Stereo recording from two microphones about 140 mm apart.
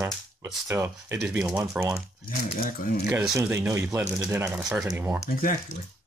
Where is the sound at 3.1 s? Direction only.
5° right (ahead or behind).